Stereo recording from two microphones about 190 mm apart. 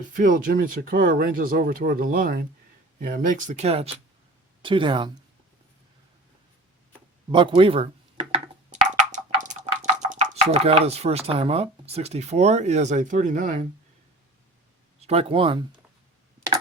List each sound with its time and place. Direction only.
0.1 s speech: 45° right (ahead or behind); by 5.1 s 25° right (ahead or behind)
7.3 s a sound: 25° right (ahead or behind)
10.1 s speech: 35° right (ahead or behind)
15.0 s speech: 30° right (ahead or behind)